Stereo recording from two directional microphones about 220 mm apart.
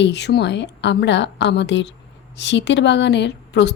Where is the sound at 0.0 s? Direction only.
50° left (ahead or behind).